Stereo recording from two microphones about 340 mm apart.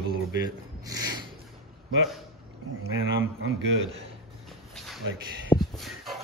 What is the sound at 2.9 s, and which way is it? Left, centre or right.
Speech, right.